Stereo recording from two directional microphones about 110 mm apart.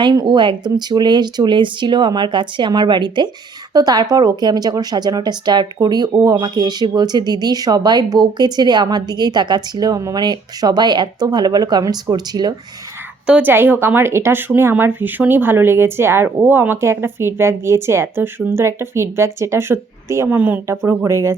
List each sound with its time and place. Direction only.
0.3 s speech: 45° right (ahead or behind)
13.2 s speech: 15° right (ahead or behind)